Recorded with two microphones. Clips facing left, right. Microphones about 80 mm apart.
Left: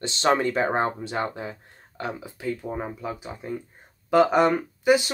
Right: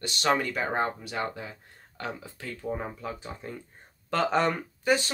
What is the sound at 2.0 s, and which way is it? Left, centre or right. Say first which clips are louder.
Speech: left 7 dB; centre.